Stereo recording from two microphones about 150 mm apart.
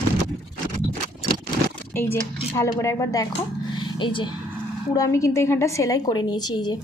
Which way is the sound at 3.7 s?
30° left (ahead or behind).